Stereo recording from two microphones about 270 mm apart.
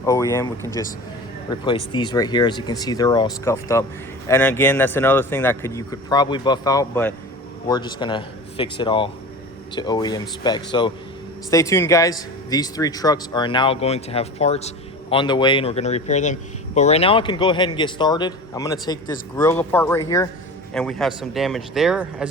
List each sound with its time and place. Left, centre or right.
0.0 s a man's voice: centre
20.7 s speech: centre